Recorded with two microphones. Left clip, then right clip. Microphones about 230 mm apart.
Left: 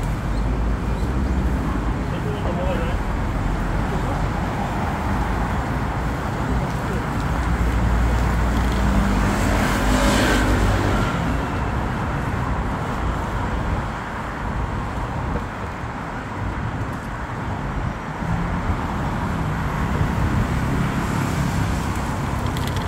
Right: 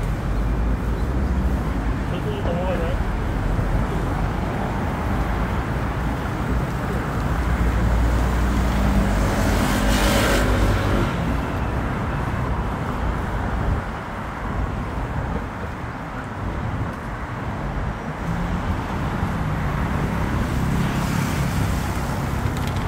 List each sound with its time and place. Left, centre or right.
9.9 s vehicle: right